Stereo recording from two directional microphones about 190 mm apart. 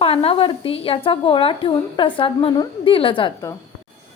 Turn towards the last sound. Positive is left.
turn(degrees=25)  # may be behind; listen again after turning